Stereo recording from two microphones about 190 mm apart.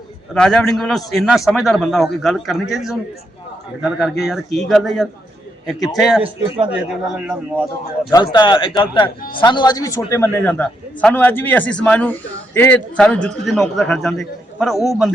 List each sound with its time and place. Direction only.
0.3 s a man's voice: 5° left (ahead or behind)
6.2 s a man's voice: 25° right (ahead or behind)
6.7 s a man's voice: 10° right (ahead or behind)
8.1 s a man's voice: 20° left (ahead or behind); by 14.8 s centre (ahead or behind)